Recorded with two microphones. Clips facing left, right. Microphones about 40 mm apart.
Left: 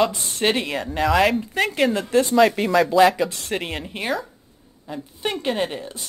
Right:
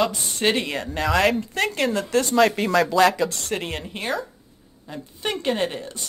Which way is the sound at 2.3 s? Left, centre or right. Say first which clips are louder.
Left 1 dB; centre.